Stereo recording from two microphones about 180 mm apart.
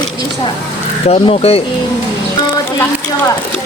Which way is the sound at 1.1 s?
35° left (ahead or behind).